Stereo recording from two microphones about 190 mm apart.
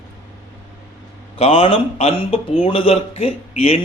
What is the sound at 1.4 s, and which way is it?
A man's voice, 30° left (ahead or behind).